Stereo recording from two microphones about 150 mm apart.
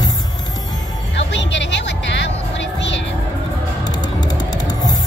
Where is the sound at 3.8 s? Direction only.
25° left (ahead or behind).